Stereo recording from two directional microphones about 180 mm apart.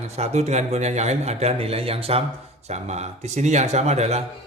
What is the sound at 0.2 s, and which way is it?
A man's voice, 35° right (ahead or behind).